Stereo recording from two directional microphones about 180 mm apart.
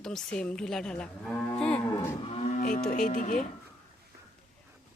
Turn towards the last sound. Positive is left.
turn(degrees=50)  # may be behind; listen again after turning